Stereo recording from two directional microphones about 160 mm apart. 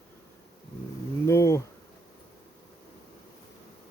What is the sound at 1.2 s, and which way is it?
Speech, 15° left (ahead or behind).